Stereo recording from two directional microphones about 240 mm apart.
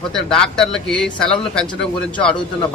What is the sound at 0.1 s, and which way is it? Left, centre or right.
Speech, centre.